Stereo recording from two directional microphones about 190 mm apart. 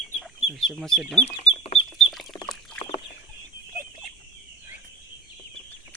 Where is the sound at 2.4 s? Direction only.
5° left (ahead or behind).